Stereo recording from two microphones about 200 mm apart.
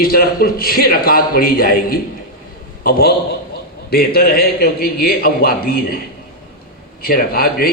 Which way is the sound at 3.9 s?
50° left (ahead or behind).